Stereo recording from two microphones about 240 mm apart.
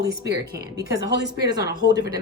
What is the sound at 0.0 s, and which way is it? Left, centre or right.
Speech, right.